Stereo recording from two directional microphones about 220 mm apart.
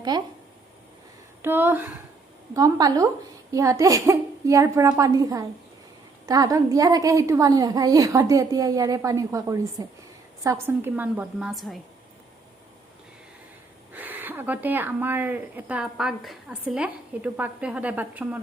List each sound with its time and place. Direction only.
0.1 s speech: 20° right (ahead or behind)
1.4 s speech: 10° right (ahead or behind)
13.9 s speech: 10° right (ahead or behind)